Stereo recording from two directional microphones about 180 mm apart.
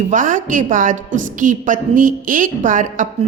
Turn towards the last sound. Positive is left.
turn(degrees=-45)  # may be behind; listen again after turning